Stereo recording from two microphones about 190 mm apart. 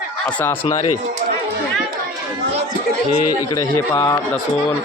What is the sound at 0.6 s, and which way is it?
Speech, 20° left (ahead or behind).